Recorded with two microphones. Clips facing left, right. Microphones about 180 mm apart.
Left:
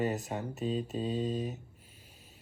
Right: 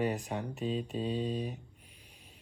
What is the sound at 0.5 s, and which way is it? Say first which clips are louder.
Speech: left 2 dB; 40° left (ahead or behind).